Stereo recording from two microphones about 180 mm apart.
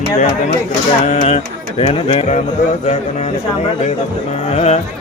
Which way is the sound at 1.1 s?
40° left (ahead or behind).